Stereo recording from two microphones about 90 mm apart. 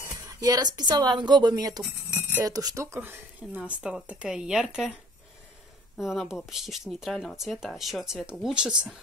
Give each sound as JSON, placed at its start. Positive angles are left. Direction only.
{"t": 0.1, "sound": "speech", "side_deg": -40}
{"t": 2.8, "sound": "speech", "side_deg": -30}
{"t": 5.9, "sound": "speech", "side_deg": -5}